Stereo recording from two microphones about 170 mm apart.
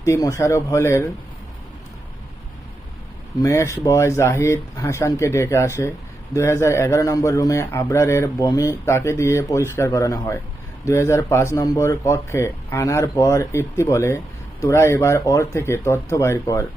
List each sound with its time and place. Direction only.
0.0 s speech: 20° left (ahead or behind)
3.4 s speech: 15° left (ahead or behind)